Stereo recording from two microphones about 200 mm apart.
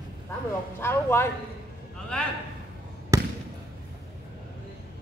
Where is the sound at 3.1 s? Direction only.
15° right (ahead or behind).